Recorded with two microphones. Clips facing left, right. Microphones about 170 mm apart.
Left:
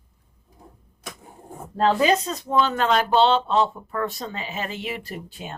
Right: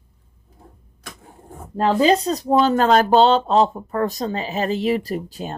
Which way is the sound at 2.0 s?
35° right (ahead or behind).